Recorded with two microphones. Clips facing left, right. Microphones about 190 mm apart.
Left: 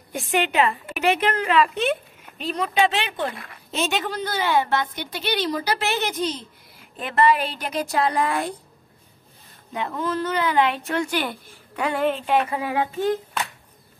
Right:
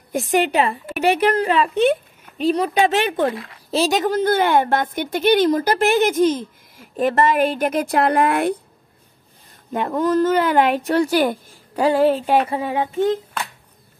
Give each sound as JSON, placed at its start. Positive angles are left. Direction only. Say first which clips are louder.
{"t": 0.1, "sound": "a woman's voice", "louder": "right 5 dB", "side_deg": -40}
{"t": 9.7, "sound": "speech", "louder": "right 7 dB", "side_deg": -45}